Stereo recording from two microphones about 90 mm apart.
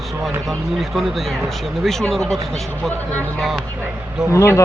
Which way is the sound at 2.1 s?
5° left (ahead or behind).